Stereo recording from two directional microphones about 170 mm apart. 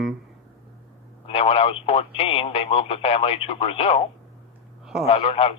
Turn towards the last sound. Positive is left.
turn(degrees=35)  # may be behind; listen again after turning